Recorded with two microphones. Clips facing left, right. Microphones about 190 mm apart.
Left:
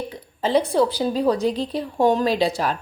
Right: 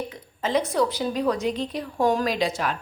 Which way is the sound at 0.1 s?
30° left (ahead or behind).